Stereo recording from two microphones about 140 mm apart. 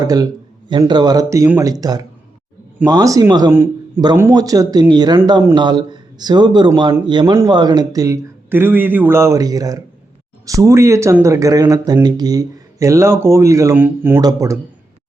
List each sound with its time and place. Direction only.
0.0 s a man's voice: 25° right (ahead or behind)
3.5 s a man's voice: 15° right (ahead or behind)